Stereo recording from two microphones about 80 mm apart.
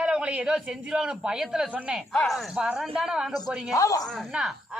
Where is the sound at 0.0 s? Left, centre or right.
Centre.